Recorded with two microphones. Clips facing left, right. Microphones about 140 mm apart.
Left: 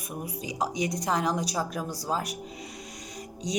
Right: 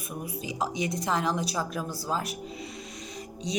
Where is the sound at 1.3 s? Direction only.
35° left (ahead or behind).